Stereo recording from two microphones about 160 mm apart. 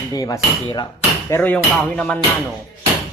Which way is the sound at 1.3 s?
10° left (ahead or behind).